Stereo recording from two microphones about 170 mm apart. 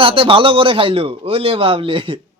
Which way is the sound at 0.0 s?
30° right (ahead or behind).